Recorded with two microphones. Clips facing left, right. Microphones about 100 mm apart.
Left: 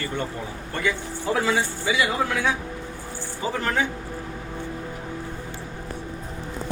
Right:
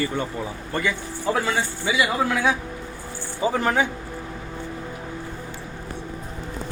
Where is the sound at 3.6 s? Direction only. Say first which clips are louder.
Right 2 dB; 15° right (ahead or behind).